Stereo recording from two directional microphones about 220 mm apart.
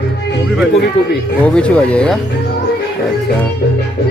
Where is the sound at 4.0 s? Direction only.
45° left (ahead or behind).